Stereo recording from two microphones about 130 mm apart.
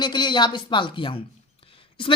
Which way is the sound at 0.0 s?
35° left (ahead or behind).